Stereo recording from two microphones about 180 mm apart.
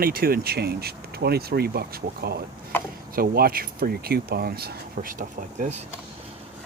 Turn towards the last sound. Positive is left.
turn(degrees=-45)  # may be behind; listen again after turning